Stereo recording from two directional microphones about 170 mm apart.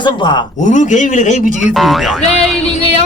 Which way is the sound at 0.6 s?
45° left (ahead or behind).